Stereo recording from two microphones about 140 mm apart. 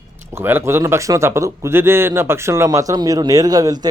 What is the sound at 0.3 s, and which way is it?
A man's voice, 15° right (ahead or behind).